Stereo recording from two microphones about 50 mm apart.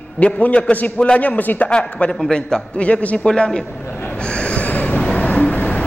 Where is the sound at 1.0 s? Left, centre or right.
Left.